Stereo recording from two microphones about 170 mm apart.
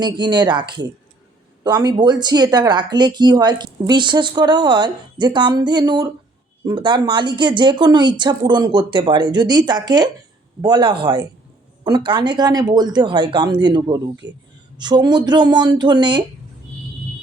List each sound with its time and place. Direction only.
0.0 s speech: 25° right (ahead or behind)
1.6 s speech: 25° right (ahead or behind)